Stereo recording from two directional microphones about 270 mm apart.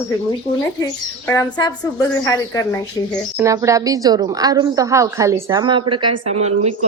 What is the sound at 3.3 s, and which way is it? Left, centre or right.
A woman's voice, centre.